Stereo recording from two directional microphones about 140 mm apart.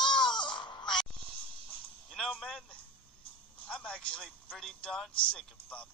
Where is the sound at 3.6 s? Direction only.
5° left (ahead or behind).